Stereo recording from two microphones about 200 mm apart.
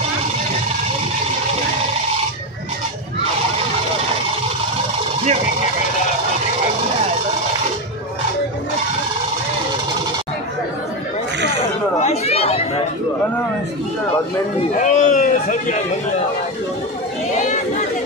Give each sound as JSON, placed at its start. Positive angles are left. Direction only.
{"t": 12.0, "sound": "chatter", "side_deg": 30}
{"t": 14.7, "sound": "a sound", "side_deg": 40}
{"t": 17.4, "sound": "chatter", "side_deg": 35}